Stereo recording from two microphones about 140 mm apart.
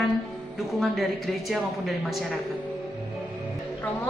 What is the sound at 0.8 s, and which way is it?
Speech, centre (ahead or behind).